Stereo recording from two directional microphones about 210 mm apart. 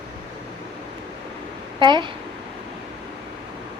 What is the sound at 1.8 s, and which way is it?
Speech, 20° right (ahead or behind).